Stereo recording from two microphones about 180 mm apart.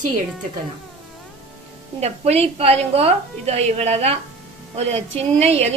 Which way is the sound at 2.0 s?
35° right (ahead or behind).